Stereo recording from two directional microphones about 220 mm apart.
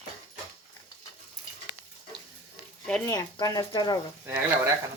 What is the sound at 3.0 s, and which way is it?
Speech, 15° left (ahead or behind).